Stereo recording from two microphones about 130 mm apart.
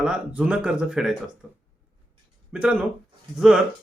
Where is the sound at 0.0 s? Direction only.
10° right (ahead or behind).